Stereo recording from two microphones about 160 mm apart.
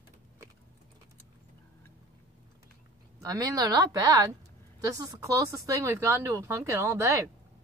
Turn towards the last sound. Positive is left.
turn(degrees=-15)  # may be behind; listen again after turning